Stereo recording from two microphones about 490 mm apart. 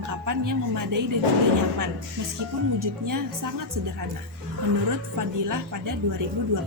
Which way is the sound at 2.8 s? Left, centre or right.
Right.